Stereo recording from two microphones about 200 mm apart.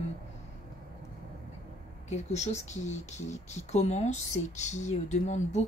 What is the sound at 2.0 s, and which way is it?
Speech, 35° left (ahead or behind).